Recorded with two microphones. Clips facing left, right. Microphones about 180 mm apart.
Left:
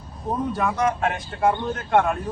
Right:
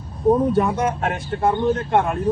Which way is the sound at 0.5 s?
30° right (ahead or behind).